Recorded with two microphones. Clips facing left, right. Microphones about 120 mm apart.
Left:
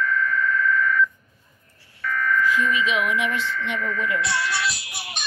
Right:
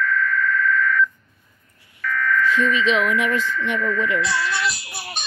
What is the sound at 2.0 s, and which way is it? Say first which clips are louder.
Buzzer: right 1 dB; 20° left (ahead or behind).